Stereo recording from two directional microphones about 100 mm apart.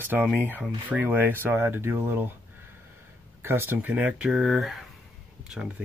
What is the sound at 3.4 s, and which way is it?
Speech, 20° right (ahead or behind).